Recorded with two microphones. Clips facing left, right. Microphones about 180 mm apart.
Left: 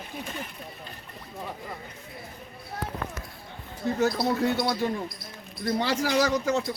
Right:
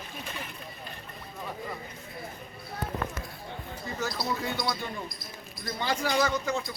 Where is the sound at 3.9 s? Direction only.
60° left (ahead or behind).